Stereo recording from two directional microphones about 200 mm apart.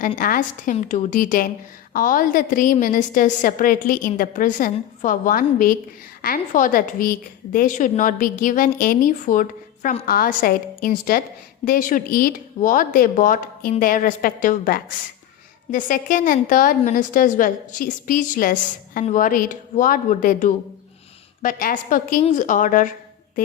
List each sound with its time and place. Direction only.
0.2 s a woman's voice: 40° left (ahead or behind)